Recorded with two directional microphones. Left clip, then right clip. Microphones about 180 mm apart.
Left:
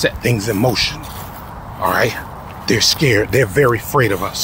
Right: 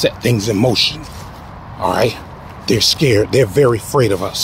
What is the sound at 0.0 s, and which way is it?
Speech, 15° right (ahead or behind).